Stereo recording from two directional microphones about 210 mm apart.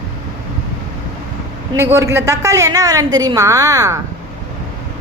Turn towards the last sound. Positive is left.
turn(degrees=-15)  # may be behind; listen again after turning